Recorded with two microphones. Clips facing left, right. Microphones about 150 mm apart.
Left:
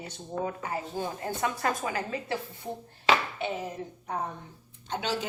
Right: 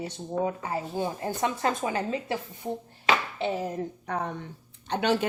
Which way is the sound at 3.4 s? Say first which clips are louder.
Right 4 dB; 45° right (ahead or behind).